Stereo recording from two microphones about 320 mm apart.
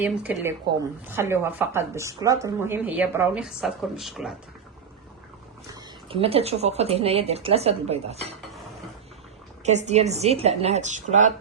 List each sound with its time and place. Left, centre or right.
0.0 s speech: centre
5.7 s speech: centre
9.6 s speech: right